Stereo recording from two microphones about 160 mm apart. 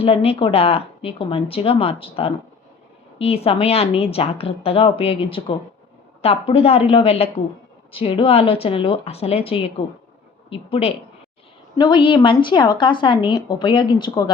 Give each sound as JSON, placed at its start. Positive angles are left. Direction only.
{"t": 0.0, "sound": "a woman's voice", "side_deg": 35}